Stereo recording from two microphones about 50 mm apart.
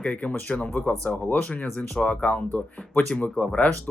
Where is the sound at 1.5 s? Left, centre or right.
Left.